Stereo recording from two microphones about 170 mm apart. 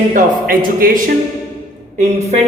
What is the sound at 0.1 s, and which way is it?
A man's voice, 55° right (ahead or behind).